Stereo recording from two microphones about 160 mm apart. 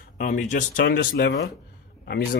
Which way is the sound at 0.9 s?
85° left.